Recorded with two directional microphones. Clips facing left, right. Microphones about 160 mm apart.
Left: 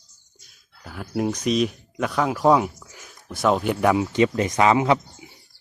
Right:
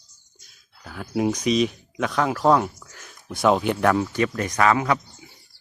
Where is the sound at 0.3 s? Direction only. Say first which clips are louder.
Even; centre (ahead or behind).